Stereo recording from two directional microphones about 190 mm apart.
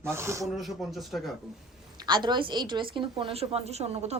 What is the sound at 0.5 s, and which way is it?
Speech, centre (ahead or behind).